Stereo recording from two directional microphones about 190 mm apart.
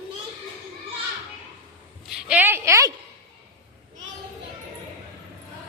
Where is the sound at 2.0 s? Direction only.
5° right (ahead or behind).